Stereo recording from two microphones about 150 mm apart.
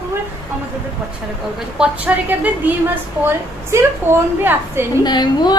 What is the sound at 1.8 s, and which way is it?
A woman's voice, 10° right (ahead or behind).